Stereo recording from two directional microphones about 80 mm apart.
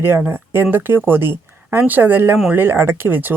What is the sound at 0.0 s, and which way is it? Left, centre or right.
A woman's voice, right.